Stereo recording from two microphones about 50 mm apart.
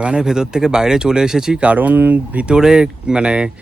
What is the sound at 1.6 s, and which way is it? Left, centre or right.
Speech, right.